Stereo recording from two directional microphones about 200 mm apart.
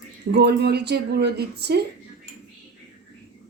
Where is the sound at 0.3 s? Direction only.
55° right (ahead or behind).